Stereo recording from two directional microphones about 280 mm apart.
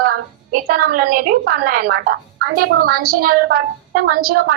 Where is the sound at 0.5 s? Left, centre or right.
Right.